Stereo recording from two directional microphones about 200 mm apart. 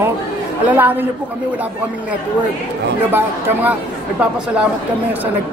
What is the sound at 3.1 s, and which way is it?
Speech, 10° right (ahead or behind).